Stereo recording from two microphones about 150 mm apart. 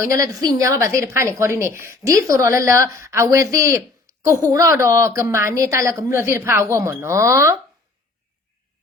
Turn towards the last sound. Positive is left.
turn(degrees=-20)  # may be behind; listen again after turning